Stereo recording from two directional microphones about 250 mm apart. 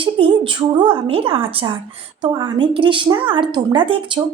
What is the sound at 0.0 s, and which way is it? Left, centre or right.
A woman's voice, right.